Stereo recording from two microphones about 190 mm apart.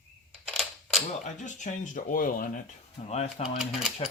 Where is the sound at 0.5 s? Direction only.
Centre (ahead or behind).